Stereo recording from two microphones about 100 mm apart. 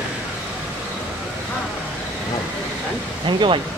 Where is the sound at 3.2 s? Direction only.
55° right (ahead or behind).